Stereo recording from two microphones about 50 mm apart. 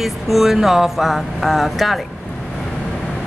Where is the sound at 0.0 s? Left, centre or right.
Centre.